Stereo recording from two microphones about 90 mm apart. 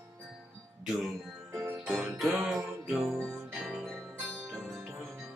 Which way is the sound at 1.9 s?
Centre (ahead or behind).